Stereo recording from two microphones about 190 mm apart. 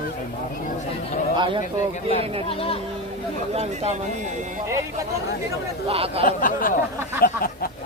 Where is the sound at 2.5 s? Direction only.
30° left (ahead or behind).